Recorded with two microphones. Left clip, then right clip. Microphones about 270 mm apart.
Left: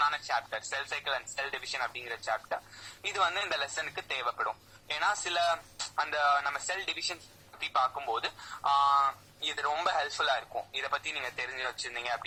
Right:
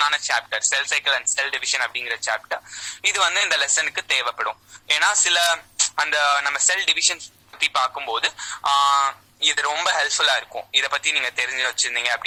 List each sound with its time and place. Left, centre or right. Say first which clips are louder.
0.0 s speech: right 9 dB; right